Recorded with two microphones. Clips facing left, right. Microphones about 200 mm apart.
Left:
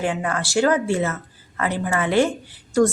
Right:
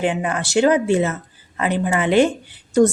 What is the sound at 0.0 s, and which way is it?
A woman's voice, 20° right (ahead or behind).